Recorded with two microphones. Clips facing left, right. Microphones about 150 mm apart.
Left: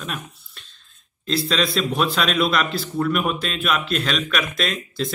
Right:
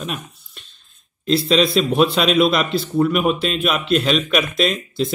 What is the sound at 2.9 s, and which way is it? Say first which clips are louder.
Speech: right 5 dB; 10° right (ahead or behind).